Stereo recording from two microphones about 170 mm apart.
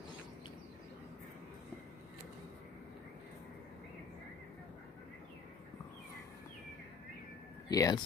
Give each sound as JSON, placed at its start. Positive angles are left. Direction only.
{"t": 7.6, "sound": "speech", "side_deg": 20}